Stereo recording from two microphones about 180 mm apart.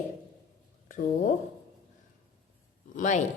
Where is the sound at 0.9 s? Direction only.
45° left (ahead or behind).